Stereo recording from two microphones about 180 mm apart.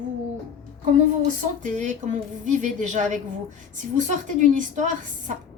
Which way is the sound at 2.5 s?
45° right (ahead or behind).